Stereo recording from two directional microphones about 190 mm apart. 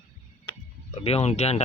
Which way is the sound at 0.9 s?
35° left (ahead or behind).